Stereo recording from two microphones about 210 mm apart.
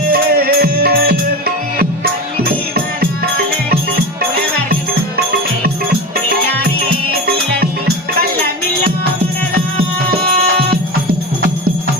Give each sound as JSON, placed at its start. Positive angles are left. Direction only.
{"t": 0.1, "sound": "music", "side_deg": -45}
{"t": 2.4, "sound": "music", "side_deg": -45}
{"t": 10.1, "sound": "music", "side_deg": -45}